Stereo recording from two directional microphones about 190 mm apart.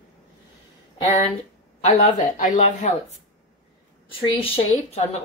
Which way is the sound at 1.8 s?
35° left (ahead or behind).